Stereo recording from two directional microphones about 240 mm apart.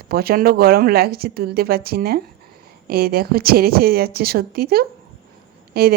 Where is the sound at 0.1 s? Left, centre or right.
Right.